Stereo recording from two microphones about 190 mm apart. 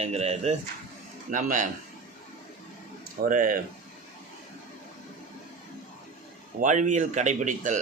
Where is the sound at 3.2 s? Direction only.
45° right (ahead or behind).